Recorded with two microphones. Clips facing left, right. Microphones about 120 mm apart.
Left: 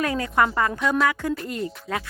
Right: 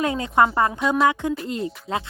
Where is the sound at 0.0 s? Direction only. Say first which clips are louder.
Right 3 dB; 25° right (ahead or behind).